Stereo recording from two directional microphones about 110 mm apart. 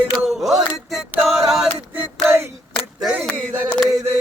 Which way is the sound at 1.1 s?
5° right (ahead or behind).